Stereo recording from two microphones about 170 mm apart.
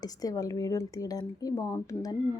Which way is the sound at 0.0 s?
20° left (ahead or behind).